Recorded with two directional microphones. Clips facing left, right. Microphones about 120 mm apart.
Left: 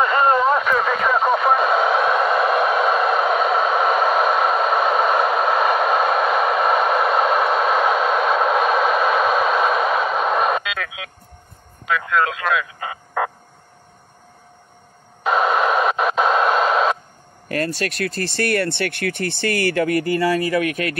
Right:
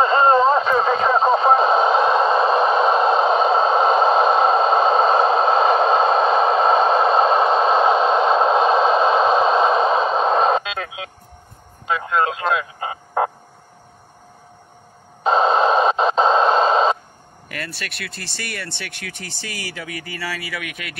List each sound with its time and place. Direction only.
0.0 s radio: 25° right (ahead or behind)
11.9 s a sound: 25° right (ahead or behind)
15.2 s radio: 25° right (ahead or behind)
17.5 s speech: 40° left (ahead or behind)